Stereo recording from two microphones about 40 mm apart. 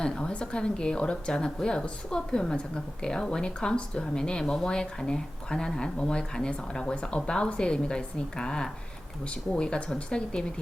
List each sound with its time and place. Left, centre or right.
0.0 s a woman's voice: left